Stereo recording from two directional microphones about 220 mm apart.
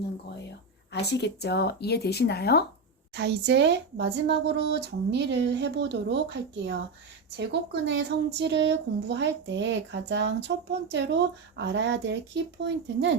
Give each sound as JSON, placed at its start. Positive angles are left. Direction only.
{"t": 1.0, "sound": "speech", "side_deg": 50}
{"t": 3.2, "sound": "speech", "side_deg": -50}